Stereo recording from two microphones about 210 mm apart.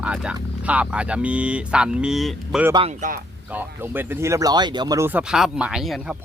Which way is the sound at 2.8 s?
40° right (ahead or behind).